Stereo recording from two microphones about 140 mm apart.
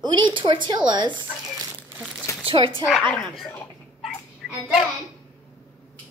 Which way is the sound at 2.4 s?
40° right (ahead or behind).